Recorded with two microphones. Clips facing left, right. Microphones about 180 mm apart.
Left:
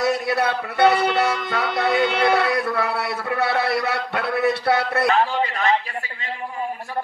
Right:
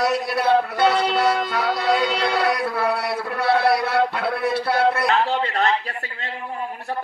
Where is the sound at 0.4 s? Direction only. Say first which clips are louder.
Right 3 dB; 60° left (ahead or behind).